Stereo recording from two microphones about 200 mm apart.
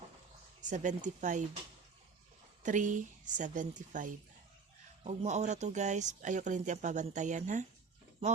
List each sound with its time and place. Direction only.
0.6 s speech: 40° right (ahead or behind)
2.6 s speech: 40° right (ahead or behind)